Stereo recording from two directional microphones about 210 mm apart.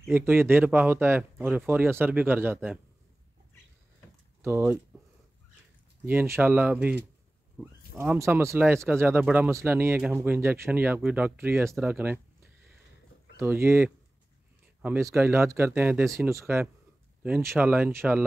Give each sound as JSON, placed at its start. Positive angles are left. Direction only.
{"t": 0.1, "sound": "speech", "side_deg": -10}
{"t": 4.4, "sound": "speech", "side_deg": -10}
{"t": 6.0, "sound": "speech", "side_deg": -10}
{"t": 13.4, "sound": "speech", "side_deg": -10}